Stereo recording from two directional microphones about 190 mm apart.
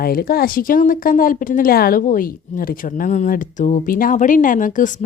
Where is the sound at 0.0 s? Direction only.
50° left (ahead or behind).